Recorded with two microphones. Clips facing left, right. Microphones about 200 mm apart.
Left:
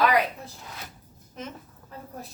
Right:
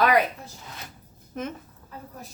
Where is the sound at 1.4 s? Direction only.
55° right (ahead or behind).